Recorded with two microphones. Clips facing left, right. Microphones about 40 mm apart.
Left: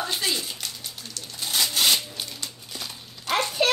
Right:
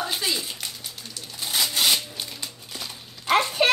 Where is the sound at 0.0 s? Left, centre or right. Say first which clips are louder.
Even; centre.